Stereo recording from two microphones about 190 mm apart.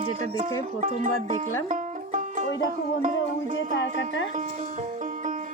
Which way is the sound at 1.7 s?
40° right (ahead or behind).